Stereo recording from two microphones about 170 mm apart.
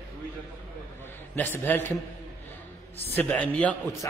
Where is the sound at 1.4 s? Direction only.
10° left (ahead or behind).